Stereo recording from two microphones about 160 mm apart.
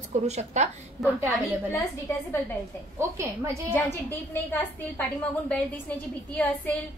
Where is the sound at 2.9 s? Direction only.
20° right (ahead or behind).